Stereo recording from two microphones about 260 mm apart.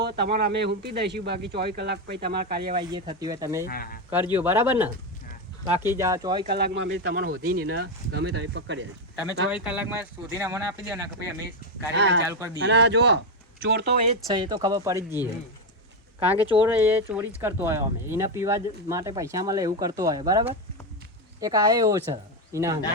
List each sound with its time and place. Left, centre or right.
0.0 s speech: right
2.7 s speech: centre
3.7 s speech: left
4.1 s speech: centre
6.0 s speech: centre
6.5 s speech: right
7.3 s speech: right
9.6 s speech: centre
11.9 s speech: right
14.3 s speech: centre
14.9 s speech: centre
16.2 s speech: centre